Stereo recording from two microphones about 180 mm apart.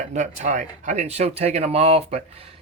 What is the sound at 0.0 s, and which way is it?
Speech, 40° right (ahead or behind).